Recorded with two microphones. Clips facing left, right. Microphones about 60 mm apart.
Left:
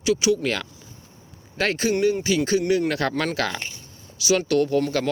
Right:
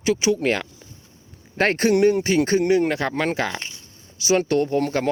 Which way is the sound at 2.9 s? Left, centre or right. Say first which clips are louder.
Right 1 dB; centre.